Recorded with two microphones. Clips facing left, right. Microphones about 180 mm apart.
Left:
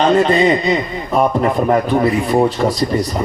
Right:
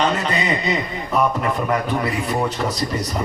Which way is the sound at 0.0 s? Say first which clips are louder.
Left 9 dB; 40° left (ahead or behind).